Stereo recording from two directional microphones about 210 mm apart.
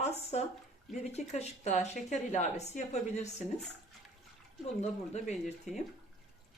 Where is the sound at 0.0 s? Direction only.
30° left (ahead or behind).